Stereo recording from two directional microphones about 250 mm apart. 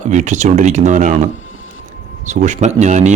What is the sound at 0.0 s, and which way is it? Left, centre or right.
Speech, right.